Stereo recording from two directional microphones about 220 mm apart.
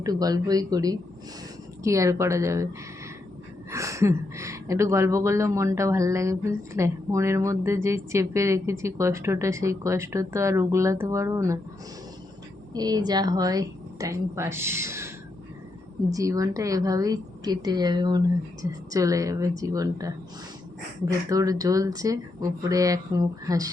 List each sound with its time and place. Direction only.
0.0 s a woman's voice: 15° right (ahead or behind)
3.7 s a woman's voice: 15° right (ahead or behind)
12.7 s a woman's voice: 15° right (ahead or behind)